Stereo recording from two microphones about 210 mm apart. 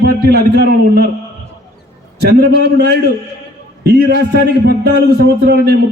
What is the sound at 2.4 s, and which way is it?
A man's voice, 50° right (ahead or behind).